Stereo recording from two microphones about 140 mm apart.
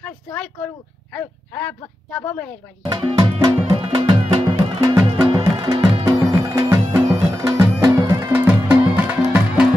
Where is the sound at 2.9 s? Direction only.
30° right (ahead or behind).